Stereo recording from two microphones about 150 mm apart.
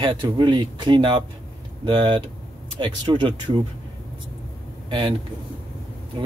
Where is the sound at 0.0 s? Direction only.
30° right (ahead or behind).